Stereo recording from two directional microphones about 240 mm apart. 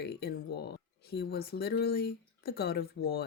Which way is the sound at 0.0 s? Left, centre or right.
Left.